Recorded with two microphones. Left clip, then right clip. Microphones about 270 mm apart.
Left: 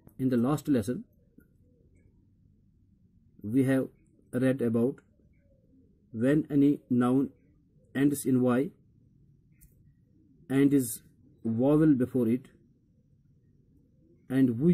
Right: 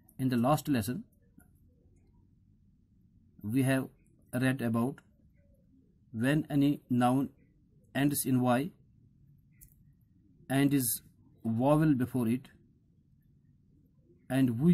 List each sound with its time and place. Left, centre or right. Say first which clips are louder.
0.2 s speech: even; right
3.4 s speech: left 4 dB; right
6.1 s speech: left 4 dB; right
10.5 s speech: left 4 dB; right
14.3 s speech: left 3 dB; right